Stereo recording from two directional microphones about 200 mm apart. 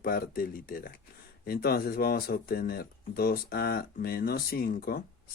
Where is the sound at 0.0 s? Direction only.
45° left (ahead or behind).